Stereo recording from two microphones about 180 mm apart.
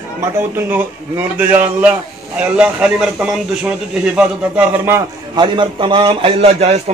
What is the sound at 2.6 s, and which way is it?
A man's voice, 5° right (ahead or behind).